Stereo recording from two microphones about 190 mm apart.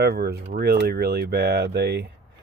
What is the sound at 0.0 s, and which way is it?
Speech, 60° right (ahead or behind).